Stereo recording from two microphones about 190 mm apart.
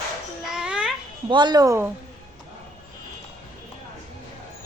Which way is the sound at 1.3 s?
25° right (ahead or behind).